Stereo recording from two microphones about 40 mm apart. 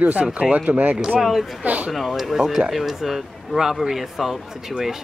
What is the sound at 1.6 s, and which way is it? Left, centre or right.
Speech, right.